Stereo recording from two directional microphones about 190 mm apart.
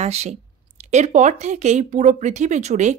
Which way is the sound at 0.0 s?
35° right (ahead or behind).